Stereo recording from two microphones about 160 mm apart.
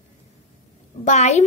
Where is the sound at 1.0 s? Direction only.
45° left (ahead or behind).